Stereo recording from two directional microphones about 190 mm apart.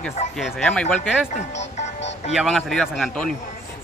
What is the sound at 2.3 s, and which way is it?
Speech, centre (ahead or behind).